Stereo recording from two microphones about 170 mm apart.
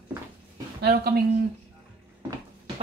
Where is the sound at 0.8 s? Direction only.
65° right (ahead or behind).